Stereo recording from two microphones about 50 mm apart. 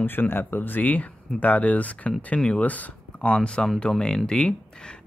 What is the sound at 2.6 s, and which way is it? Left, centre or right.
Speech, left.